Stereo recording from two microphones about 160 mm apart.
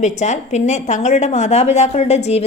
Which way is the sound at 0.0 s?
50° left (ahead or behind).